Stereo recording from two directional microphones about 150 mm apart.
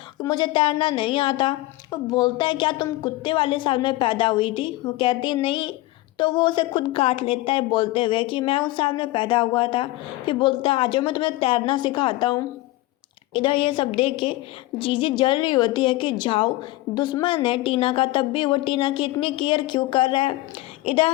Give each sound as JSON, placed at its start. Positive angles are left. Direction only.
{"t": 0.2, "sound": "speech", "side_deg": 30}